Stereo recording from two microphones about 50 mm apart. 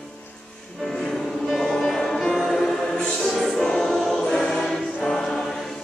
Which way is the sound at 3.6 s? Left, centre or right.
Centre.